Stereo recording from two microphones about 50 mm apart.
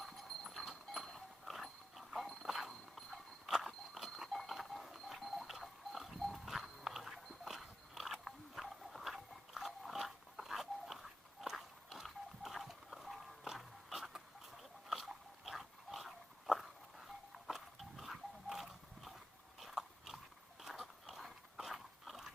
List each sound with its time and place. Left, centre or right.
0.0 s goat: centre
1.5 s dog: centre
2.5 s horse: centre
3.7 s dog: centre
17.4 s livestock: centre
19.5 s biting: centre
20.6 s dog: centre